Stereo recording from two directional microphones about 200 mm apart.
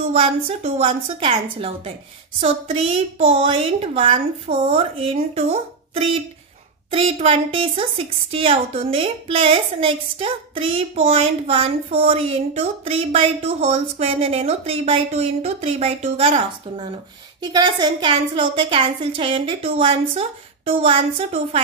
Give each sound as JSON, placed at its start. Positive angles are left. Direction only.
{"t": 0.1, "sound": "a woman's voice", "side_deg": -30}